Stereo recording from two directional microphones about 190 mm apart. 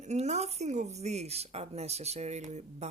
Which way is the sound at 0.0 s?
35° right (ahead or behind).